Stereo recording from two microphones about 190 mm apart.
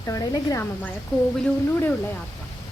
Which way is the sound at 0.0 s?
15° left (ahead or behind).